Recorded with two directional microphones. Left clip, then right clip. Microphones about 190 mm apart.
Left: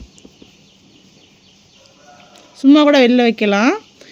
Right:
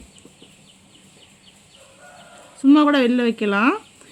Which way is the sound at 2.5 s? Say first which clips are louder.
Left 5 dB; 20° left (ahead or behind).